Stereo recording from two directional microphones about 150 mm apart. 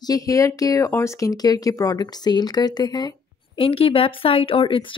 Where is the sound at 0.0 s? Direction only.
25° left (ahead or behind).